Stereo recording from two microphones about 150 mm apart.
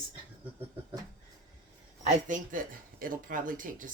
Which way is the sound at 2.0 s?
55° right (ahead or behind).